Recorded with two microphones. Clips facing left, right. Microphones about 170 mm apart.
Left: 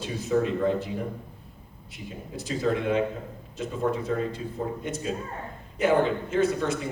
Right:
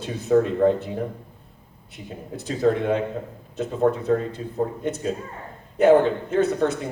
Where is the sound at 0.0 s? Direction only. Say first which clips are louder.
Right 5 dB; 55° right (ahead or behind).